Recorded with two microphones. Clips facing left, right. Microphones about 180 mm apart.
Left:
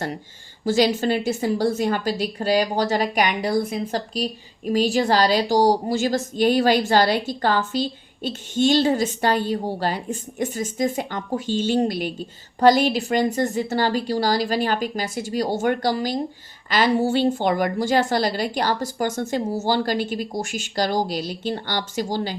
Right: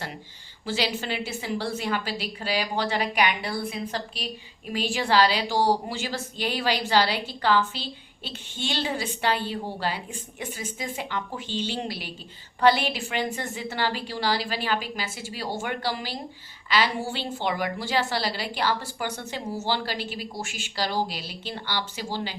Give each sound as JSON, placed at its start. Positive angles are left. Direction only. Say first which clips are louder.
{"t": 0.6, "sound": "a woman's voice", "louder": "left 9 dB", "side_deg": 45}